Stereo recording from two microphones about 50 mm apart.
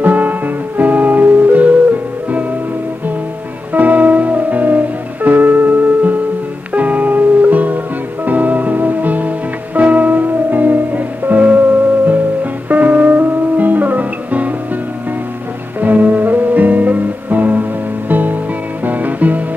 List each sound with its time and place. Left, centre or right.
0.0 s music: right
3.7 s music: right
12.6 s music: right
15.8 s music: right